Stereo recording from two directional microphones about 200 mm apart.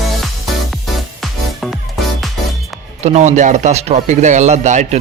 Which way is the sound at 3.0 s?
35° right (ahead or behind).